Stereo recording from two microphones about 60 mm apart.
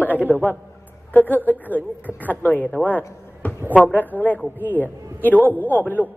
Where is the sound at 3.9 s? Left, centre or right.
Left.